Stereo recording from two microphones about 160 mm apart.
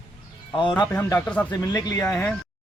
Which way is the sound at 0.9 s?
15° left (ahead or behind).